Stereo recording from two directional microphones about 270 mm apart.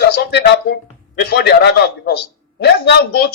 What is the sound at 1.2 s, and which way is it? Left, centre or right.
A man's voice, left.